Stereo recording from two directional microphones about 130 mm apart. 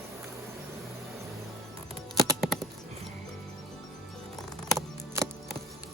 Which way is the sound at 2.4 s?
Centre (ahead or behind).